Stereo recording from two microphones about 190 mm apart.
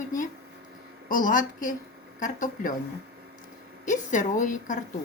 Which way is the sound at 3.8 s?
40° left (ahead or behind).